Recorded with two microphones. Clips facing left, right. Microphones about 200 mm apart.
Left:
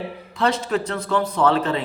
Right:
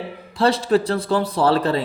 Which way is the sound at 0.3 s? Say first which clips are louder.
Right 4 dB; 35° right (ahead or behind).